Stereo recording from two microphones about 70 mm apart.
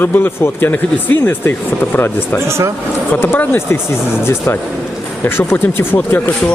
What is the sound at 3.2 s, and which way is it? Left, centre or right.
Speech, left.